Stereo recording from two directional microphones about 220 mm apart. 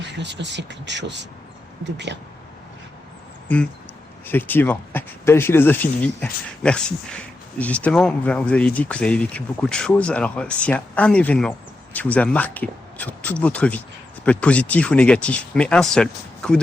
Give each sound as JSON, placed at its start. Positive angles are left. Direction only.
{"t": 0.0, "sound": "speech", "side_deg": -50}
{"t": 4.3, "sound": "speech", "side_deg": 10}